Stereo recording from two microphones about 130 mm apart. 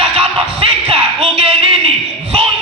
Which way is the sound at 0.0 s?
45° right (ahead or behind).